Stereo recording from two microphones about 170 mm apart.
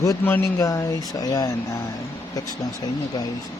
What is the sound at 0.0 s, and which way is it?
Speech, 15° left (ahead or behind).